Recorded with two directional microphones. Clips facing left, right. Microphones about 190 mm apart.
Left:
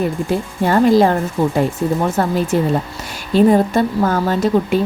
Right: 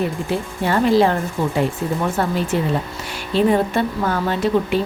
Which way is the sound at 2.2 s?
40° left (ahead or behind).